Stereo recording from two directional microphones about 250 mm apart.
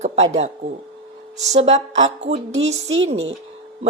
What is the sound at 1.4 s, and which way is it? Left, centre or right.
Speech, right.